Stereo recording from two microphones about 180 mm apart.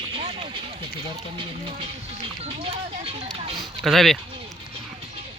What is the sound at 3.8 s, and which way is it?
Speech, centre (ahead or behind).